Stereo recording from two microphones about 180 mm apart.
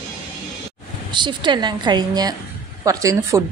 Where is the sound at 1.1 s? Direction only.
25° right (ahead or behind).